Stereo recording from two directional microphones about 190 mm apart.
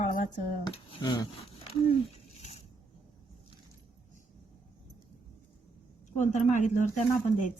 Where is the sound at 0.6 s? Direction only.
25° left (ahead or behind).